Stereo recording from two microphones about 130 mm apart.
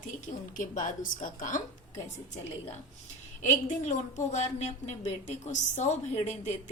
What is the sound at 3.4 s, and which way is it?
A woman's voice, 75° left (ahead or behind).